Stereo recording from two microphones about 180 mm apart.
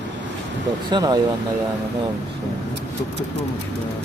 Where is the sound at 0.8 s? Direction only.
20° right (ahead or behind).